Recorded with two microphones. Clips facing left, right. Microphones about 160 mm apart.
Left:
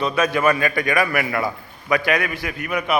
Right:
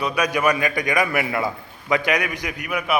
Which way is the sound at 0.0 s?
15° right (ahead or behind).